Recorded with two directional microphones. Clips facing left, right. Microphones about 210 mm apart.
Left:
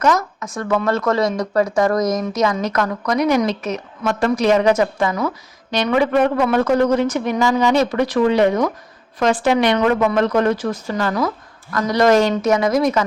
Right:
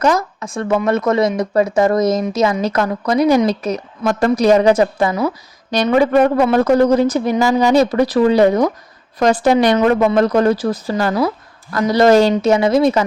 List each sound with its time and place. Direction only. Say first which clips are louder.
0.0 s a woman's voice: right 2 dB; 30° right (ahead or behind)